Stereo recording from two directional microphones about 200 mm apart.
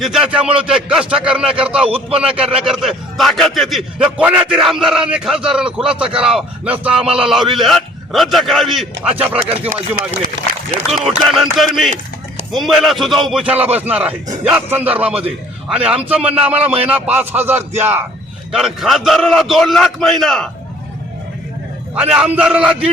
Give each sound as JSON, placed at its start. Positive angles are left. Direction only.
{"t": 0.0, "sound": "speech", "side_deg": -5}
{"t": 10.8, "sound": "a man's voice", "side_deg": 0}
{"t": 16.2, "sound": "speech", "side_deg": -30}
{"t": 16.5, "sound": "a man's voice", "side_deg": -5}
{"t": 21.9, "sound": "speech", "side_deg": -5}